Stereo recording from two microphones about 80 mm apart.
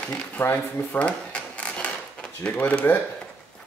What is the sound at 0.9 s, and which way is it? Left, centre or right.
Drawer open or close, centre.